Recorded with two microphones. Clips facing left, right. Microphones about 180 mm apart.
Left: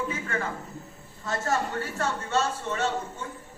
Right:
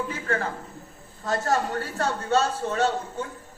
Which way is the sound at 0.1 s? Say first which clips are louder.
Right 3 dB; 35° right (ahead or behind).